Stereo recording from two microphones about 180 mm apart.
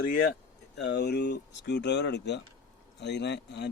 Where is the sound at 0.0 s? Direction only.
50° left (ahead or behind).